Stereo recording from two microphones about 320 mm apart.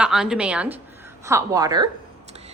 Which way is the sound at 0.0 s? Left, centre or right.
Centre.